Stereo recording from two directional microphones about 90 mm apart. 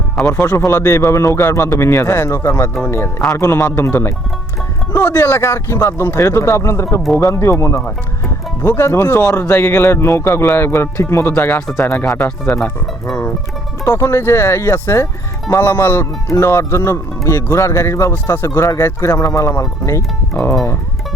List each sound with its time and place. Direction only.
0.3 s speech: 30° left (ahead or behind)
13.8 s speech: 30° left (ahead or behind)